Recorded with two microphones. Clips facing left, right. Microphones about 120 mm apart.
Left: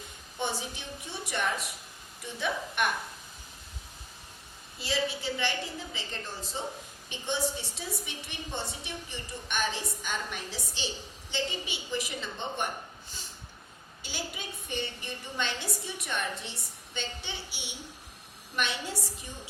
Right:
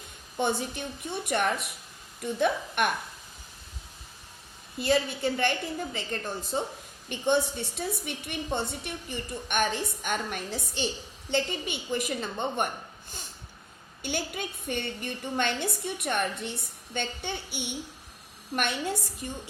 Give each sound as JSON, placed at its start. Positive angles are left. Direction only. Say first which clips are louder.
{"t": 0.3, "sound": "a woman's voice", "louder": "right 6 dB", "side_deg": -55}
{"t": 4.8, "sound": "a woman's voice", "louder": "right 6 dB", "side_deg": -55}
{"t": 14.0, "sound": "a woman's voice", "louder": "right 7 dB", "side_deg": -55}